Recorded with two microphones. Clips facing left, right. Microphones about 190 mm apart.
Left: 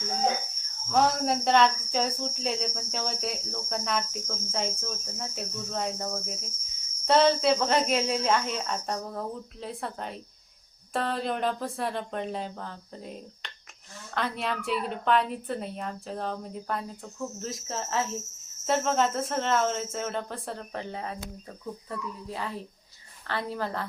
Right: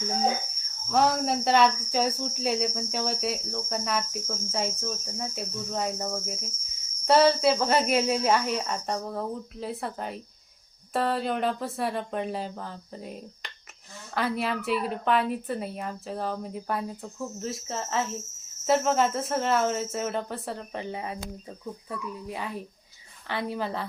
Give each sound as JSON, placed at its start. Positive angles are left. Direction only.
{"t": 0.9, "sound": "cricket", "side_deg": 0}
{"t": 21.8, "sound": "speech", "side_deg": -10}